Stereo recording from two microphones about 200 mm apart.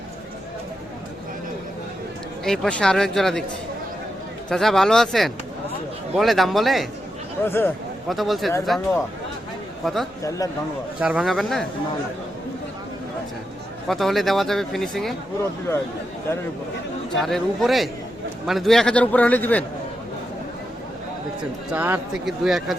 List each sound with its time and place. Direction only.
2.4 s speech: 5° left (ahead or behind)
4.4 s speech: centre (ahead or behind)
7.4 s a man's voice: 10° left (ahead or behind)
8.1 s speech: centre (ahead or behind)
9.8 s speech: centre (ahead or behind)
10.2 s a man's voice: 15° left (ahead or behind)
11.0 s speech: 5° right (ahead or behind)
13.8 s speech: centre (ahead or behind)
17.2 s a man's voice: centre (ahead or behind)
21.7 s speech: 5° right (ahead or behind)